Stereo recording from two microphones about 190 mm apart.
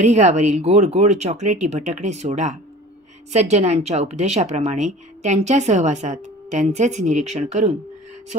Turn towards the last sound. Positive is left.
turn(degrees=-35)  # may be behind; listen again after turning